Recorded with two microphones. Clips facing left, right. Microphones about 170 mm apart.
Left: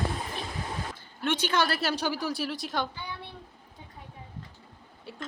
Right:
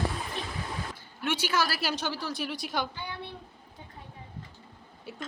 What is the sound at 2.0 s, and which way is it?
Speech, 15° left (ahead or behind).